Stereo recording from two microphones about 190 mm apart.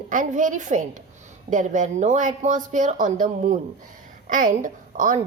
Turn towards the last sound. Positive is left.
turn(degrees=-40)  # may be behind; listen again after turning